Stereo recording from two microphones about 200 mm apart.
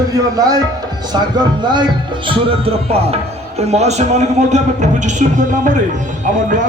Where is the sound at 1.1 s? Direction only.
20° right (ahead or behind); by 5.8 s 40° right (ahead or behind).